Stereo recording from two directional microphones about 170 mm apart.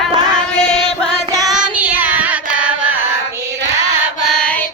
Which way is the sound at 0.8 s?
5° left (ahead or behind).